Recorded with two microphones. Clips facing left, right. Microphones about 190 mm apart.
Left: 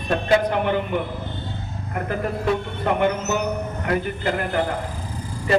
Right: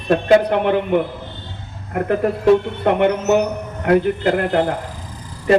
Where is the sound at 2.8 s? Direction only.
65° right (ahead or behind).